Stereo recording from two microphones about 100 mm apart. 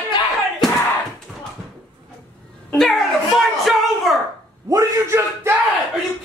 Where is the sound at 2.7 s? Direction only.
Centre (ahead or behind).